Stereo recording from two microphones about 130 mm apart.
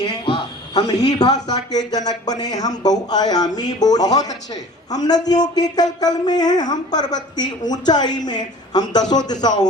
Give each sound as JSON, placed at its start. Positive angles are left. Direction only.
{"t": 0.0, "sound": "speech", "side_deg": 40}